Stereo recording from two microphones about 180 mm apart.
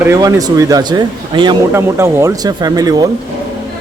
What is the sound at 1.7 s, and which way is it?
Speech, 15° right (ahead or behind).